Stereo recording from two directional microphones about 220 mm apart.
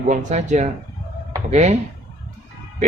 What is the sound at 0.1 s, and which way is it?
Speech, 30° right (ahead or behind).